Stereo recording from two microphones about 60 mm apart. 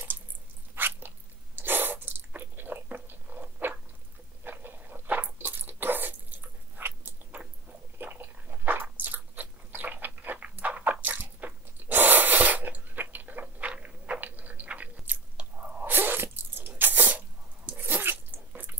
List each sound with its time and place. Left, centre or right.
0.7 s cat: right
4.5 s biting: right
8.0 s dog: right
9.0 s biting: right
17.6 s dog: right